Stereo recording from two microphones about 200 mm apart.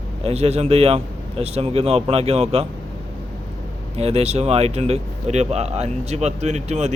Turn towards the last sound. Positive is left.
turn(degrees=-35)  # may be behind; listen again after turning